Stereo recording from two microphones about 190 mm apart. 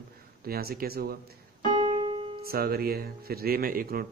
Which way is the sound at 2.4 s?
55° right (ahead or behind).